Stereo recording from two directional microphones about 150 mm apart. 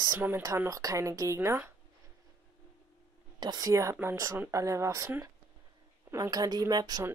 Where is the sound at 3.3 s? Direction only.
25° right (ahead or behind).